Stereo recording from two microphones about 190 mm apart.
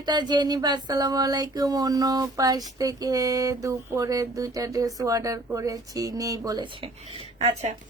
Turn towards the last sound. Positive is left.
turn(degrees=-35)  # may be behind; listen again after turning